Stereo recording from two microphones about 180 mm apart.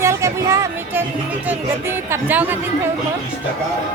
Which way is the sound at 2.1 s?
10° right (ahead or behind).